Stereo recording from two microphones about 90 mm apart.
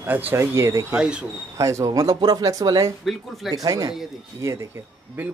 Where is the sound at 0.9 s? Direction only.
10° right (ahead or behind).